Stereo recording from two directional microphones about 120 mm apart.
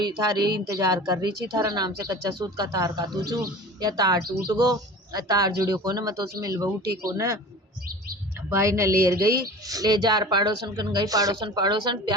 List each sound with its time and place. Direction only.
0.0 s a woman's voice: 35° right (ahead or behind)
8.5 s a woman's voice: 25° right (ahead or behind)